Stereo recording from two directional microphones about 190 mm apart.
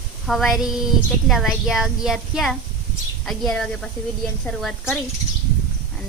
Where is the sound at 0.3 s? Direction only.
Centre (ahead or behind).